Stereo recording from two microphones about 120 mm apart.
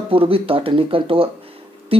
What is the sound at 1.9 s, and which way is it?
Music, 50° right (ahead or behind).